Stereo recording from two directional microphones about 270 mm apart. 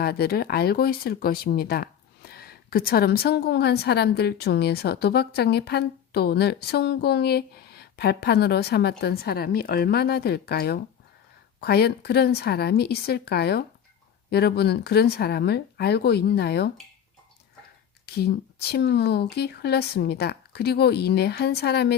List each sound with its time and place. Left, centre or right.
0.0 s speech: left
18.0 s speech: left